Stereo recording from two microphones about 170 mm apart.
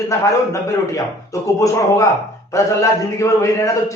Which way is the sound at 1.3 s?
20° left (ahead or behind).